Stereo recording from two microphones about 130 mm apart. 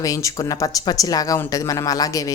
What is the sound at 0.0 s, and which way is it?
A woman's voice, 25° left (ahead or behind).